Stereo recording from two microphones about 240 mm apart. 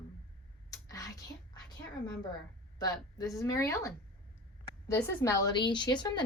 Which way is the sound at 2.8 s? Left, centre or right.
Centre.